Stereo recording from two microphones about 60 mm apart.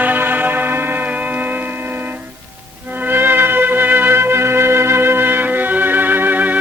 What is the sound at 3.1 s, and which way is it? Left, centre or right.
Music, right.